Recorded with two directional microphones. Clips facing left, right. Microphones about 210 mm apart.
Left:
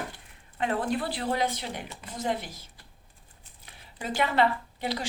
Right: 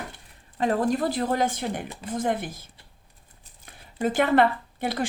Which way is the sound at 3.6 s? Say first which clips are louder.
Right 10 dB; 50° right (ahead or behind).